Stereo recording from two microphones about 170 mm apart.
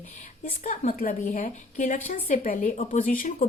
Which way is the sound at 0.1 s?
45° left (ahead or behind).